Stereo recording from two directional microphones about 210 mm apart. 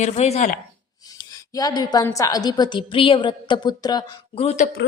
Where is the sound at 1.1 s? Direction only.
15° left (ahead or behind).